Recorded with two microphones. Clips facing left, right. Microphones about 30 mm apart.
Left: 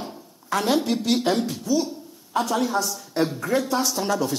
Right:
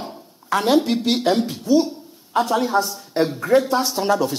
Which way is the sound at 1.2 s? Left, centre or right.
Centre.